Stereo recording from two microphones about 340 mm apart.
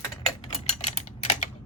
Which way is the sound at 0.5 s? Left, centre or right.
Centre.